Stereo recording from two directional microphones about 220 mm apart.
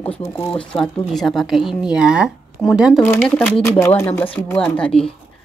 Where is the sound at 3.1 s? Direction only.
10° left (ahead or behind).